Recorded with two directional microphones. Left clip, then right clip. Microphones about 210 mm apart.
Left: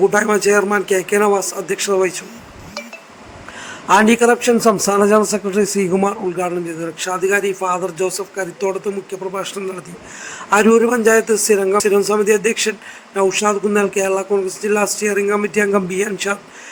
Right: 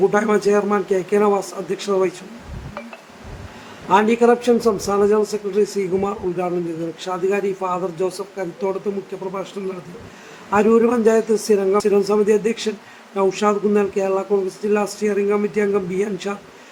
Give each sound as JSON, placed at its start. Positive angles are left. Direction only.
{"t": 0.0, "sound": "a man's voice", "side_deg": 25}
{"t": 3.8, "sound": "a man's voice", "side_deg": 25}